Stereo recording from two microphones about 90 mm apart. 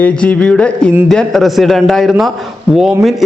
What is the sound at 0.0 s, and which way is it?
A man's voice, 15° left (ahead or behind).